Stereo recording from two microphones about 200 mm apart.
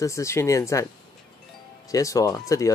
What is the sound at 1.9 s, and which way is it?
Speech, 15° left (ahead or behind).